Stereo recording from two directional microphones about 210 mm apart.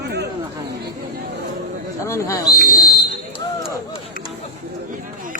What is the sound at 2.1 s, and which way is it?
Speech, 15° left (ahead or behind).